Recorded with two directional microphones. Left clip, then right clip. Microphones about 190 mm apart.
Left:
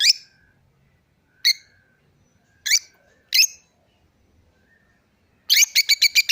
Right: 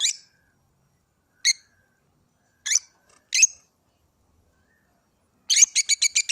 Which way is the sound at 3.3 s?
40° left (ahead or behind).